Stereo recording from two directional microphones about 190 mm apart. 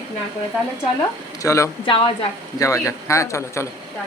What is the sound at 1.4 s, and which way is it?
A man's voice, 15° left (ahead or behind).